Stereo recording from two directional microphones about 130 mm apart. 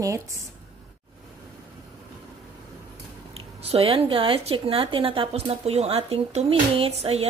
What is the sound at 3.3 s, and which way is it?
A woman's voice, 50° right (ahead or behind).